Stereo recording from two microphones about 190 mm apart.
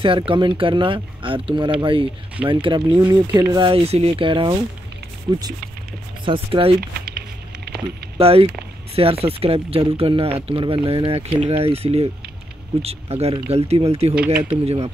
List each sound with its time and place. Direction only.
0.0 s speech: 30° right (ahead or behind)
7.1 s a sound: 55° right (ahead or behind)
8.2 s speech: 30° right (ahead or behind)